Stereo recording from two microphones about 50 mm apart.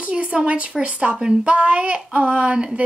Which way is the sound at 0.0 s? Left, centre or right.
Right.